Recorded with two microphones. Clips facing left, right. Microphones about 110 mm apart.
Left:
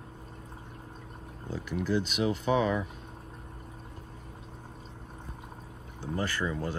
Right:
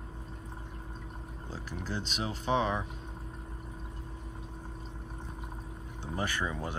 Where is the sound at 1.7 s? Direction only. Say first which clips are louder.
Left 9 dB; 35° right (ahead or behind).